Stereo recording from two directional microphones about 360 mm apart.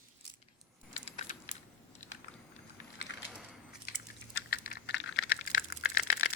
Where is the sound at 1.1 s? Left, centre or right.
Centre.